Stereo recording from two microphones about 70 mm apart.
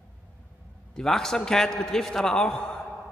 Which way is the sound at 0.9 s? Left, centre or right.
Centre.